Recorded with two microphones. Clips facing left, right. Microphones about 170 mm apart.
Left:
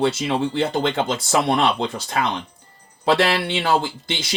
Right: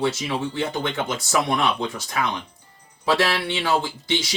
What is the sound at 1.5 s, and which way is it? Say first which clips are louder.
Speech: left 3 dB; 65° left (ahead or behind).